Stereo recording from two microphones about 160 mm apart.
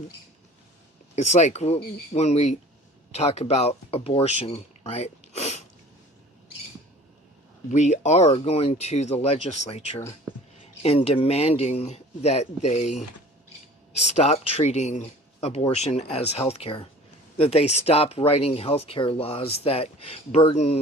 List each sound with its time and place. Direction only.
1.1 s speech: 45° left (ahead or behind)
7.7 s speech: 45° left (ahead or behind)